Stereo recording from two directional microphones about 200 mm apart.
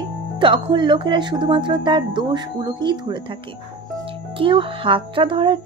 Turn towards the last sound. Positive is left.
turn(degrees=-25)  # may be behind; listen again after turning